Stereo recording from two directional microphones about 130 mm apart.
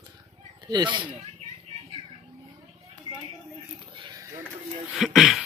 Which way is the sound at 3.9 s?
40° right (ahead or behind).